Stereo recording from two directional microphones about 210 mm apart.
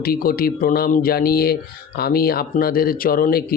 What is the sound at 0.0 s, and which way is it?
Speech, 45° left (ahead or behind).